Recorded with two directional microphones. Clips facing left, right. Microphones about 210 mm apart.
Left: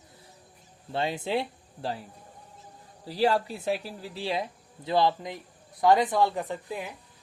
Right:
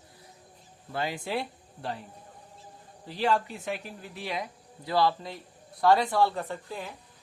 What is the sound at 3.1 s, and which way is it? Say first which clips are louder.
Speech: left 3 dB; 35° left (ahead or behind).